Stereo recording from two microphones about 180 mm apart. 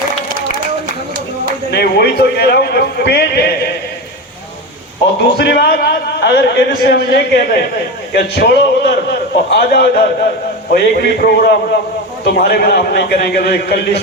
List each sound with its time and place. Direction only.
1.7 s a man's voice: 65° left (ahead or behind)
5.4 s a man's voice: 65° left (ahead or behind)